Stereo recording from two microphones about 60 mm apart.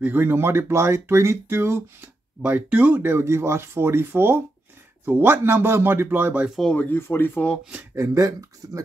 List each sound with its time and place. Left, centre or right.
0.0 s speech: right
2.4 s speech: right
3.0 s speech: right
6.9 s speech: left
7.9 s speech: right
8.6 s speech: right